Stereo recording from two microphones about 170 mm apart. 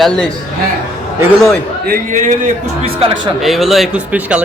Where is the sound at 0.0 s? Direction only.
5° left (ahead or behind).